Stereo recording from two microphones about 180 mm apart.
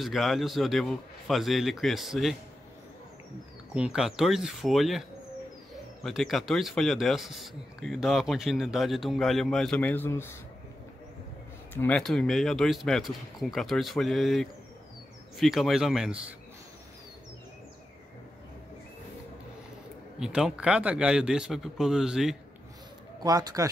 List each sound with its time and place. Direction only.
0.0 s speech: centre (ahead or behind)
3.7 s speech: 5° right (ahead or behind)
6.0 s speech: centre (ahead or behind)
11.7 s speech: 10° left (ahead or behind)
20.2 s speech: 5° right (ahead or behind)
23.2 s speech: 20° right (ahead or behind)